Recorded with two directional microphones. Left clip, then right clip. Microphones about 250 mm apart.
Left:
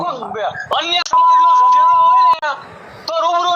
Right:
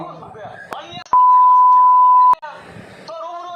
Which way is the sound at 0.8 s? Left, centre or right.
Left.